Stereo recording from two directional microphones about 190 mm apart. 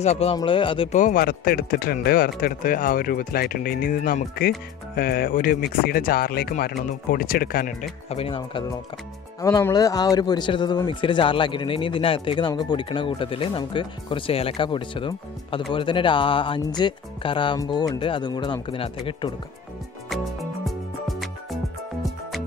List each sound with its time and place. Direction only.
0.0 s speech: 35° left (ahead or behind)
0.9 s speech: 45° left (ahead or behind)
8.1 s speech: 30° left (ahead or behind)
20.1 s music: centre (ahead or behind)